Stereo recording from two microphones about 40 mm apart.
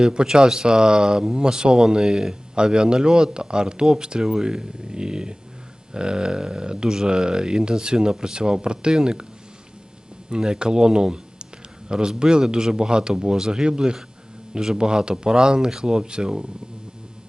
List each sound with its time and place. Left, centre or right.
0.1 s speech: right
10.2 s speech: centre